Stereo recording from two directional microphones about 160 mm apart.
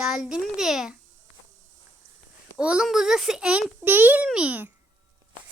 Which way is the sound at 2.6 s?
5° right (ahead or behind).